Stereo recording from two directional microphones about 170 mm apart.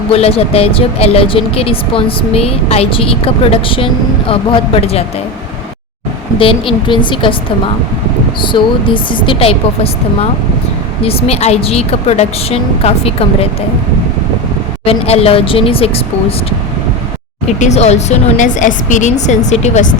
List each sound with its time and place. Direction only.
0.1 s speech: 35° left (ahead or behind)
6.4 s speech: 30° left (ahead or behind)
8.4 s speech: 30° left (ahead or behind)
11.0 s speech: 35° left (ahead or behind)
14.8 s speech: 35° left (ahead or behind)
17.6 s a woman's voice: 40° left (ahead or behind)